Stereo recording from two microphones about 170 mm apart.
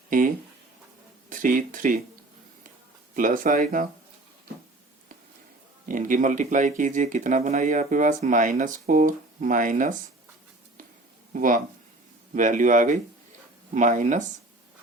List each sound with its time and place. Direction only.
0.1 s speech: 50° right (ahead or behind)
3.2 s speech: 50° right (ahead or behind)
5.9 s speech: 50° right (ahead or behind)
11.3 s speech: 55° right (ahead or behind)